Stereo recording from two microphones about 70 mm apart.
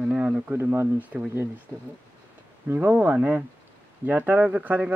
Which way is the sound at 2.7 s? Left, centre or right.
Right.